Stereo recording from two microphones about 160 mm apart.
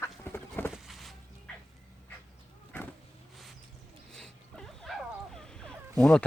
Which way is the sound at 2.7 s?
15° left (ahead or behind).